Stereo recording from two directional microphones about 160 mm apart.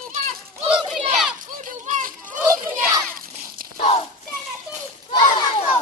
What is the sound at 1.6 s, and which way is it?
Children playing, 50° right (ahead or behind).